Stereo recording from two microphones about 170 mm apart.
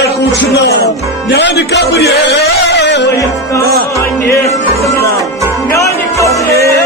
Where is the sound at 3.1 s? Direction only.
15° left (ahead or behind).